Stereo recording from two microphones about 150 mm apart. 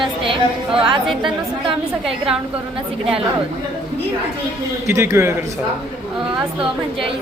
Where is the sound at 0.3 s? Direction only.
35° right (ahead or behind).